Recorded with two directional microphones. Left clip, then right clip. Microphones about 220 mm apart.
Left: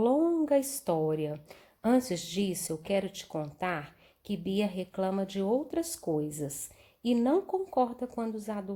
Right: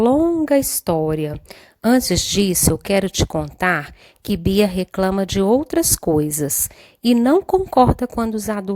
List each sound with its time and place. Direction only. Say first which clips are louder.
0.0 s a woman's voice: right 10 dB; 40° right (ahead or behind)